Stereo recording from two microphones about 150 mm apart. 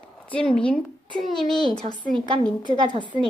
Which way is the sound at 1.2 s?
5° left (ahead or behind).